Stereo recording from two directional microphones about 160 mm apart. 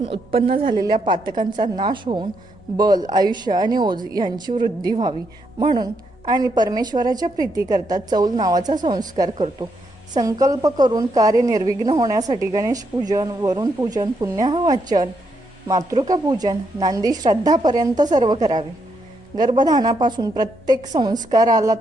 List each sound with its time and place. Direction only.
0.0 s a woman's voice: 35° right (ahead or behind)